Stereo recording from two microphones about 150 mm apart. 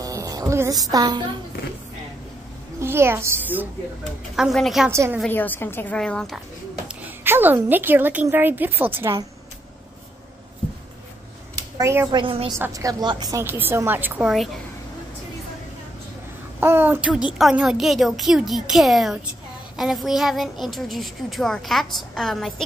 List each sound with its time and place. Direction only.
0.0 s speech: 25° right (ahead or behind)
2.8 s a woman's voice: 15° right (ahead or behind)
4.4 s a child's voice: centre (ahead or behind)
4.8 s a woman's voice: 15° right (ahead or behind)
5.3 s a woman's voice: 15° left (ahead or behind)
6.9 s a woman's voice: 10° right (ahead or behind)
11.8 s a woman's voice: 15° right (ahead or behind)
12.1 s a woman's voice: 35° right (ahead or behind)
12.5 s a woman's voice: 20° right (ahead or behind)
16.5 s a woman's voice: 15° right (ahead or behind); by 22.7 s centre (ahead or behind)